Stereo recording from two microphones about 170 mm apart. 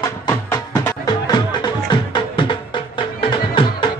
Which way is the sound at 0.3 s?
15° left (ahead or behind).